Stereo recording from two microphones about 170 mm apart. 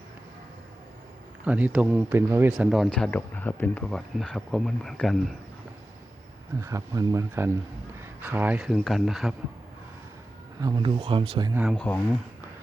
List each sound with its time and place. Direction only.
1.5 s speech: 10° right (ahead or behind)
6.6 s speech: 20° right (ahead or behind); by 9.3 s centre (ahead or behind)
10.6 s speech: 25° right (ahead or behind)
11.5 s speech: 5° right (ahead or behind)